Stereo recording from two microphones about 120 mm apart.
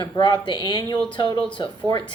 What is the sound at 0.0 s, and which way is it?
Speech, 40° left (ahead or behind).